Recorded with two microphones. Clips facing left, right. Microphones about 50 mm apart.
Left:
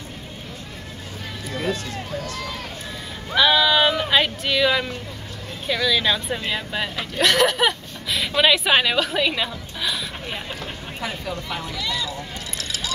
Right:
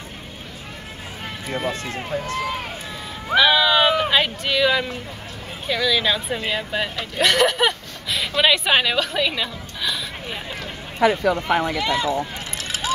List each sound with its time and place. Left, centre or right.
1.5 s speech: right
3.3 s speech: centre
11.0 s speech: right
11.4 s speech: right
11.8 s speech: right